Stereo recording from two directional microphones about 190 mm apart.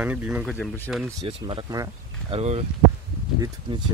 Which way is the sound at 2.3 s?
35° right (ahead or behind).